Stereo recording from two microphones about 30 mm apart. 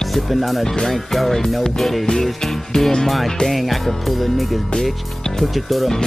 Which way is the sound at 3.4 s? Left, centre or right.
Centre.